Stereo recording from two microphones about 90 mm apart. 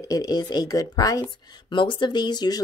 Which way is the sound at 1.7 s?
65° left (ahead or behind).